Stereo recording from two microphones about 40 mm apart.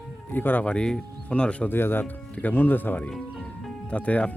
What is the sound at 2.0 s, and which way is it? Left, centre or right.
Speech, left.